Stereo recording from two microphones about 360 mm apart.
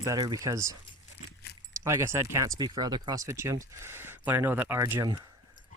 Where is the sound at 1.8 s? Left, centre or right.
Centre.